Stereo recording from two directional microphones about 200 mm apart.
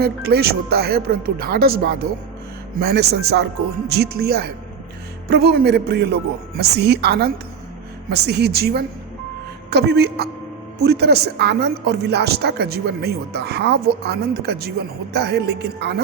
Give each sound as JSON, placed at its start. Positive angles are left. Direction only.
{"t": 0.0, "sound": "a woman's voice", "side_deg": -50}